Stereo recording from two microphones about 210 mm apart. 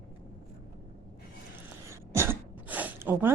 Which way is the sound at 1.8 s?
10° right (ahead or behind).